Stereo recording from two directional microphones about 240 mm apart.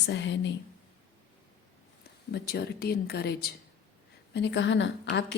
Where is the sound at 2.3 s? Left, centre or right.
Left.